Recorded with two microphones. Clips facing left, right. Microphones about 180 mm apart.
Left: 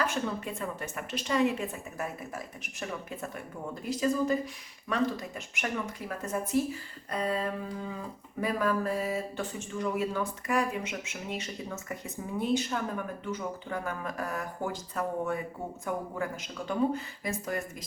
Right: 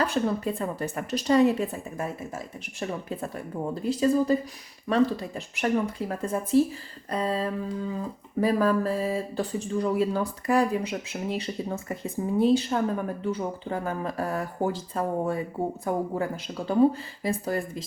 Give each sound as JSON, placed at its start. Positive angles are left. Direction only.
{"t": 0.0, "sound": "speech", "side_deg": -35}